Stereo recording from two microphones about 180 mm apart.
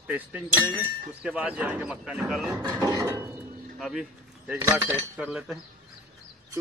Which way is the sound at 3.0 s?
15° right (ahead or behind).